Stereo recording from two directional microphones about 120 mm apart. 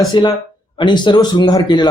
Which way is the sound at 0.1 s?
35° left (ahead or behind).